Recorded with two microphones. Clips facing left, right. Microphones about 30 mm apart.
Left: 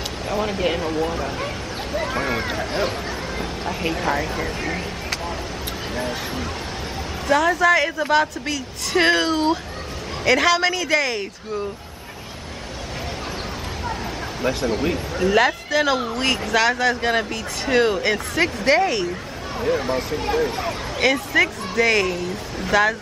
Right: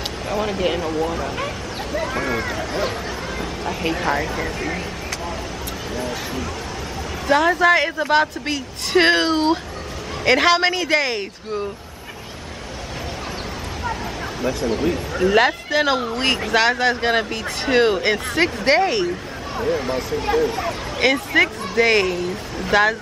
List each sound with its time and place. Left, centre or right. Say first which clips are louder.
0.3 s speech: right 1 dB; centre
1.9 s speech: even; centre
3.3 s speech: right 1 dB; centre
5.9 s speech: right 1 dB; left
7.2 s speech: right 1 dB; centre
14.7 s speech: right 1 dB; centre
15.1 s speech: right 1 dB; centre
19.6 s speech: even; centre
21.0 s speech: right 1 dB; centre
22.0 s speech: right 2 dB; centre
22.7 s speech: right 1 dB; centre